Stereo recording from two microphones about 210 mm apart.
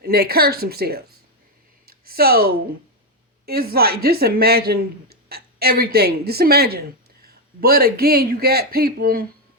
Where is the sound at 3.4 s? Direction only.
45° right (ahead or behind).